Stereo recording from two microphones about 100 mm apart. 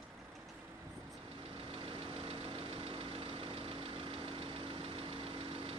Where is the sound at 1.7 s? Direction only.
65° right (ahead or behind).